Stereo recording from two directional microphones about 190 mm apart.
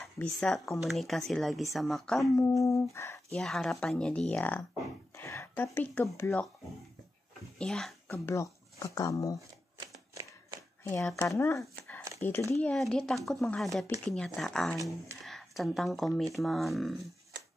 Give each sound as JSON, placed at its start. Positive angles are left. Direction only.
{"t": 0.0, "sound": "speech", "side_deg": 5}
{"t": 2.3, "sound": "humming", "side_deg": 15}
{"t": 3.3, "sound": "speech", "side_deg": 0}
{"t": 5.1, "sound": "a sound", "side_deg": 15}
{"t": 6.1, "sound": "humming", "side_deg": 15}
{"t": 7.5, "sound": "speech", "side_deg": 5}
{"t": 8.1, "sound": "speech", "side_deg": 15}
{"t": 10.8, "sound": "speech", "side_deg": 15}
{"t": 11.2, "sound": "humming", "side_deg": 15}
{"t": 12.6, "sound": "speech", "side_deg": 5}